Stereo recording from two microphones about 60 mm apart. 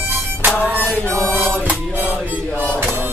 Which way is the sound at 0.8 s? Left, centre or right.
Left.